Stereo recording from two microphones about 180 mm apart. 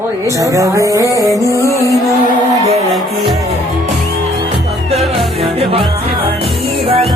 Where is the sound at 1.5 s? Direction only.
15° left (ahead or behind).